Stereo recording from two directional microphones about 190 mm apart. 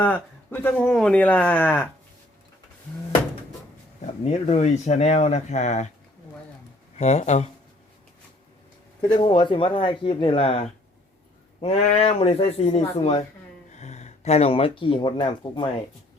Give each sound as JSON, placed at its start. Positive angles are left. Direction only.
{"t": 0.0, "sound": "speech", "side_deg": 10}
{"t": 4.0, "sound": "speech", "side_deg": 35}
{"t": 6.9, "sound": "speech", "side_deg": 35}
{"t": 9.0, "sound": "speech", "side_deg": 25}